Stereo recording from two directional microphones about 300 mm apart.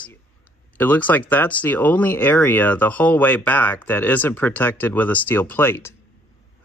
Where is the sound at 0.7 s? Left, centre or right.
Centre.